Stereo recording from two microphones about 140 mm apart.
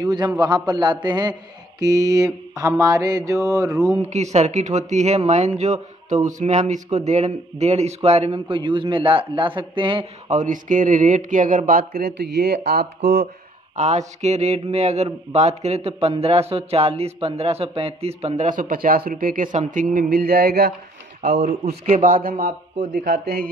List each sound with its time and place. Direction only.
0.0 s mantra: 25° right (ahead or behind)
0.7 s speech: 30° right (ahead or behind)
1.8 s mantra: 25° right (ahead or behind)
4.1 s a man's voice: 55° right (ahead or behind); by 10.3 s 35° right (ahead or behind)
10.3 s speech: 65° right (ahead or behind); by 12.1 s 85° right
13.7 s a man's voice: 55° right (ahead or behind); by 20.6 s 90° right
21.2 s speech: 50° right (ahead or behind)
21.8 s speech: 75° right (ahead or behind)
22.4 s speech: 90° right